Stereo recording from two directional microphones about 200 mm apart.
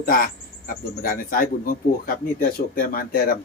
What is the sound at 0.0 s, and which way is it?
Speech, 45° left (ahead or behind).